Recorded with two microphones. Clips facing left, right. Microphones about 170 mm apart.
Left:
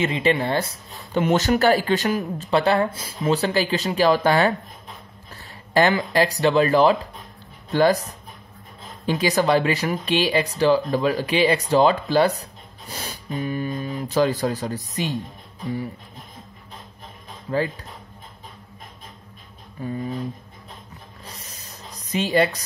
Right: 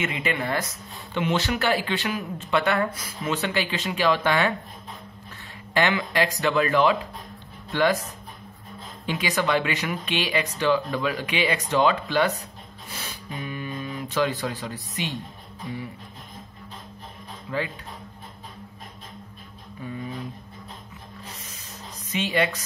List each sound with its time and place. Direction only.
0.0 s speech: 30° left (ahead or behind)
1.2 s speech: 45° left (ahead or behind)
5.7 s speech: 40° left (ahead or behind)
17.5 s speech: 40° left (ahead or behind)
19.8 s speech: 35° left (ahead or behind)
21.5 s a sound: 35° left (ahead or behind)